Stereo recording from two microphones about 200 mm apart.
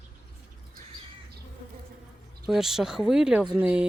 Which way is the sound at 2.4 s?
Centre (ahead or behind).